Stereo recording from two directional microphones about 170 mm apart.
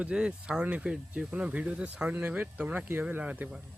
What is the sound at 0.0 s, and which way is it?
Speech, 5° right (ahead or behind).